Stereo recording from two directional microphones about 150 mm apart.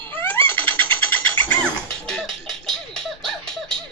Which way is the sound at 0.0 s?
15° left (ahead or behind).